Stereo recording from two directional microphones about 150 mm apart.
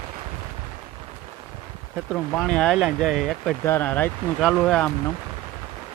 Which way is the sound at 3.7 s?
15° left (ahead or behind).